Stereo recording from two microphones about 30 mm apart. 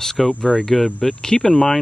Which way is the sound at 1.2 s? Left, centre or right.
Left.